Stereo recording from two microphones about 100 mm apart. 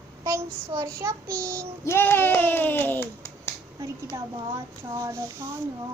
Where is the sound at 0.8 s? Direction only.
30° right (ahead or behind).